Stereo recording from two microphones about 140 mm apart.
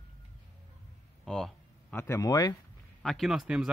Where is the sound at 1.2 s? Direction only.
Centre (ahead or behind).